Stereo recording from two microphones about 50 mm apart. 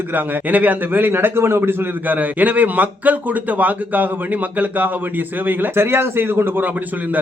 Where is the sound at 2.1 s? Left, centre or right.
Right.